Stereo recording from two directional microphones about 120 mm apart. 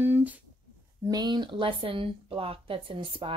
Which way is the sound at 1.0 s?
35° right (ahead or behind).